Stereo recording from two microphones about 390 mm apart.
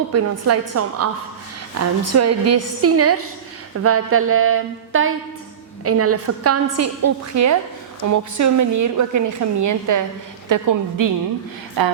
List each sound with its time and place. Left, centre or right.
0.1 s a woman's voice: right